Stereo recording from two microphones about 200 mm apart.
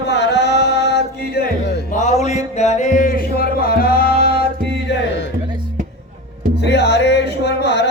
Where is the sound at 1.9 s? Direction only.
35° left (ahead or behind); by 5.3 s 55° left (ahead or behind).